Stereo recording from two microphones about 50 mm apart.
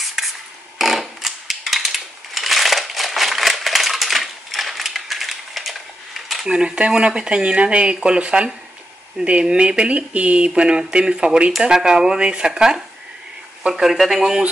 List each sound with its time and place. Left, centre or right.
0.0 s a sound: centre
1.7 s coin: centre
6.4 s speech: centre